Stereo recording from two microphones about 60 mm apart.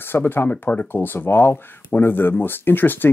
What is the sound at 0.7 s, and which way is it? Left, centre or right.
Speech, left.